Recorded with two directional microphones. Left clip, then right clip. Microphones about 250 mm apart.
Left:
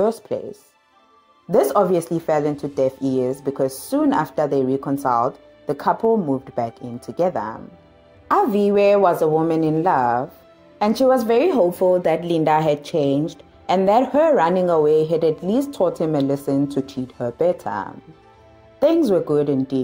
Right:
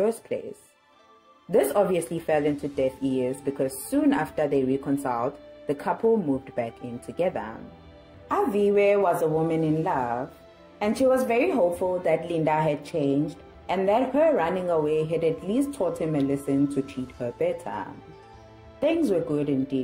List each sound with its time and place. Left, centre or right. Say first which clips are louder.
1.5 s speech: left 5 dB; left
7.2 s a woman's voice: left 6 dB; left